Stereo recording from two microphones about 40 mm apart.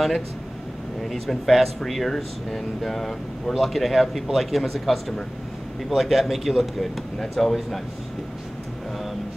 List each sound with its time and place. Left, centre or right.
1.0 s speech: centre
7.2 s speech: centre